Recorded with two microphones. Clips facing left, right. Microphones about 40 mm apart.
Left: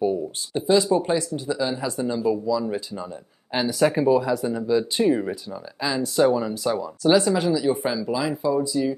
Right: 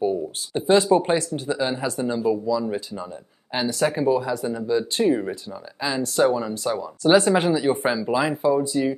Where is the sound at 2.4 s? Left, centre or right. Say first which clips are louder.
Even; centre.